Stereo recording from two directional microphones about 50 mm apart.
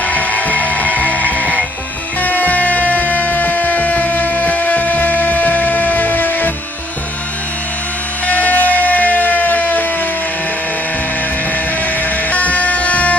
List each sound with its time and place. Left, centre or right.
0.0 s music: left
8.3 s music: left
12.3 s music: left